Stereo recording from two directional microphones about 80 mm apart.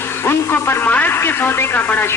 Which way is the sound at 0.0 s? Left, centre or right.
Left.